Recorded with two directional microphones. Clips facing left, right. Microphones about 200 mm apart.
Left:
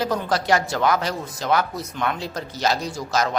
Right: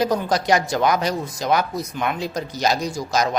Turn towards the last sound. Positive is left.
turn(degrees=-15)  # may be behind; listen again after turning